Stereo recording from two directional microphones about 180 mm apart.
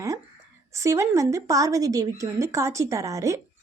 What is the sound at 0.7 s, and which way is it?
A woman's voice, 15° right (ahead or behind).